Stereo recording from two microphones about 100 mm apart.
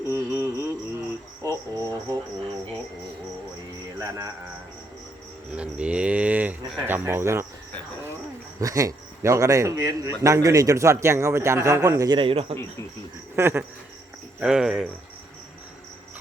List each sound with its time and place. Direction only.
0.1 s music: 25° right (ahead or behind)
1.4 s a sound: 35° right (ahead or behind)
3.9 s a sound: 35° right (ahead or behind)
5.5 s speech: 10° right (ahead or behind)
8.6 s a man's voice: 35° right (ahead or behind)
12.1 s a man's voice: 70° right (ahead or behind)
13.3 s cricket: 25° right (ahead or behind)
14.3 s speech: 10° right (ahead or behind)